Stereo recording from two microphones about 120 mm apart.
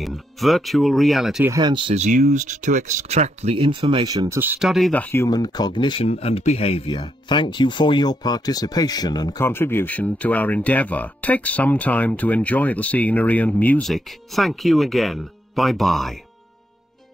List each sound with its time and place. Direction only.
0.0 s speech: centre (ahead or behind)
1.6 s speech: 40° right (ahead or behind)
2.0 s speech: 85° right; by 4.0 s 50° right (ahead or behind)
4.0 s speech: 30° right (ahead or behind)
4.6 s speech: centre (ahead or behind)
4.9 s speech: 20° left (ahead or behind)
5.3 s speech: 35° left (ahead or behind)
6.0 s speech: 55° left (ahead or behind)
6.9 s speech: 40° left (ahead or behind)
9.4 s speech: 20° left (ahead or behind)
13.8 s speech: centre (ahead or behind)